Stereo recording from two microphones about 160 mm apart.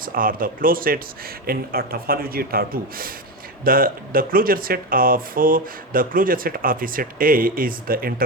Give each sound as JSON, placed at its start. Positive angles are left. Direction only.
{"t": 0.0, "sound": "speech", "side_deg": -60}